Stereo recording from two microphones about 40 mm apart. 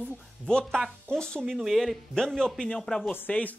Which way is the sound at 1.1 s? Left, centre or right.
Centre.